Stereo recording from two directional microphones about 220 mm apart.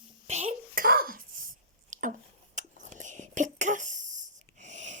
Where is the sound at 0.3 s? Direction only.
30° right (ahead or behind).